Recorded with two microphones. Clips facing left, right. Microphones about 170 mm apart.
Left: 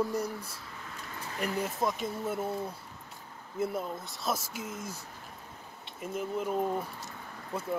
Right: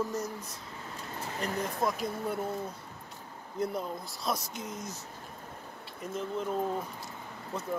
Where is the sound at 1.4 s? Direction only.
10° left (ahead or behind).